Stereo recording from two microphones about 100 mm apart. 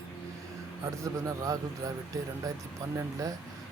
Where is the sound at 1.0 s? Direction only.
35° right (ahead or behind).